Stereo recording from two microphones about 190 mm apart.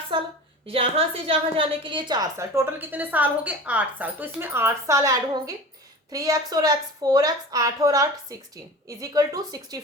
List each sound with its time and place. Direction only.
0.1 s a woman's voice: 25° right (ahead or behind)